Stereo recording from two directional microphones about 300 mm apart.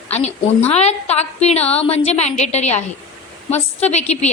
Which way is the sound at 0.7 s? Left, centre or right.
Left.